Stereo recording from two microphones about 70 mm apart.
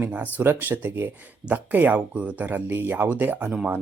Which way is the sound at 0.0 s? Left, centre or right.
Right.